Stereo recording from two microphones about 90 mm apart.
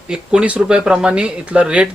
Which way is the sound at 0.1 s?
10° right (ahead or behind).